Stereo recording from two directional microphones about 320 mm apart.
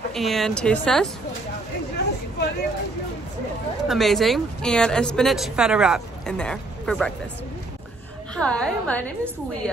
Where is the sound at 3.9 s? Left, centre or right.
Centre.